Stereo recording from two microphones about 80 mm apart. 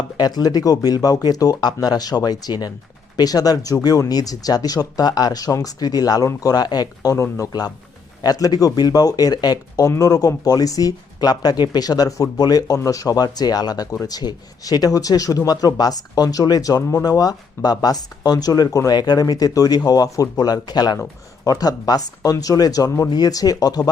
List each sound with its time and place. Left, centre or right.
0.2 s speech: left
7.2 s speech: left
8.2 s speech: left